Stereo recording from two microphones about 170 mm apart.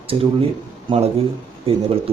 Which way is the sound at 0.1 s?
30° right (ahead or behind).